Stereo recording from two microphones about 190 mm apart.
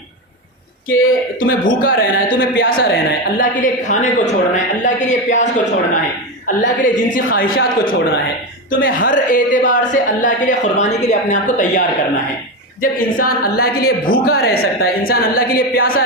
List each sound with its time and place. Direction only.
0.9 s a woman's voice: 50° left (ahead or behind)
12.8 s speech: 45° left (ahead or behind)